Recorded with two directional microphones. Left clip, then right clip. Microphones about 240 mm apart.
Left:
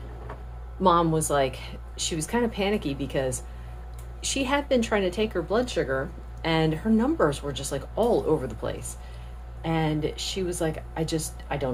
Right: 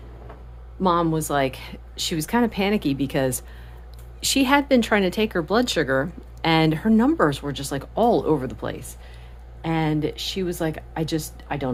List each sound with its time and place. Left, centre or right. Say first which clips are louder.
0.8 s speech: even; right